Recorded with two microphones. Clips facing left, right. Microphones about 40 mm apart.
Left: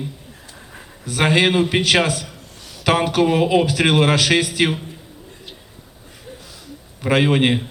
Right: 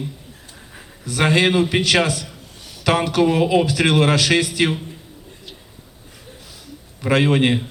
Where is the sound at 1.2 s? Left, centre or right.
Centre.